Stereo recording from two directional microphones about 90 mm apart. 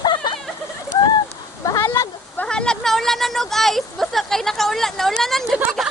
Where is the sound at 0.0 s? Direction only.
55° left (ahead or behind).